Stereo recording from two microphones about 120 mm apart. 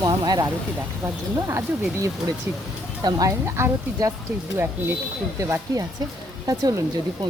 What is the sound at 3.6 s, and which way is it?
Speech, 25° right (ahead or behind).